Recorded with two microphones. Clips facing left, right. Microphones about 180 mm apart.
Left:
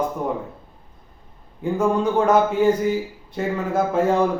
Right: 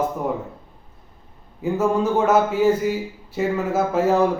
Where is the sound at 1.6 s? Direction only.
5° right (ahead or behind).